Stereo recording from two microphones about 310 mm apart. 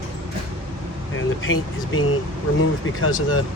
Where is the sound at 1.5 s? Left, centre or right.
Left.